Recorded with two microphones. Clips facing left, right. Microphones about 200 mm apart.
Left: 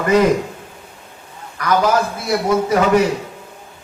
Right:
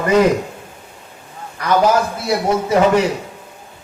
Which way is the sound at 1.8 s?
25° right (ahead or behind).